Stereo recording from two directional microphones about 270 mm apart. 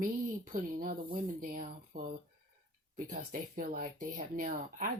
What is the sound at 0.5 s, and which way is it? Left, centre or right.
Speech, right.